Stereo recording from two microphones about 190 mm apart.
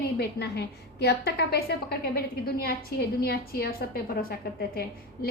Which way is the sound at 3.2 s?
50° left (ahead or behind).